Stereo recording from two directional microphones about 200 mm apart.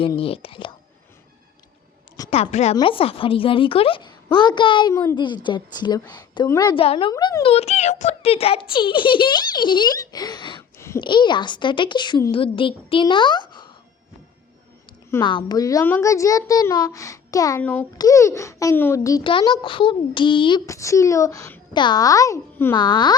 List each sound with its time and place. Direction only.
0.2 s a woman's voice: 30° left (ahead or behind)
2.3 s a woman's voice: 30° left (ahead or behind)
10.8 s a sound: 15° left (ahead or behind)
11.0 s a woman's voice: 25° left (ahead or behind)
15.2 s a child's voice: 25° left (ahead or behind)